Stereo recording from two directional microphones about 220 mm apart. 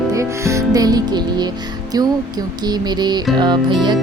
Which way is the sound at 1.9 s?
15° right (ahead or behind).